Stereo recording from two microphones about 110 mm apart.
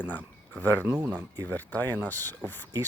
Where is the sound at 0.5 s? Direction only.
15° left (ahead or behind).